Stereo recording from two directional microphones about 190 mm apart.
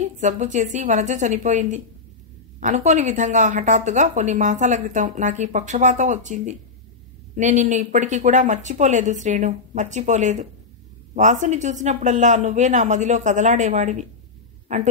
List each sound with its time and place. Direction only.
0.0 s a woman's voice: 40° right (ahead or behind)